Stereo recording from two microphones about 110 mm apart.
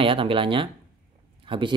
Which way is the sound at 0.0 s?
55° right (ahead or behind).